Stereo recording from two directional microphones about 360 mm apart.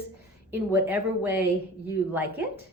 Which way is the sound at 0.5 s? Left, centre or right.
Centre.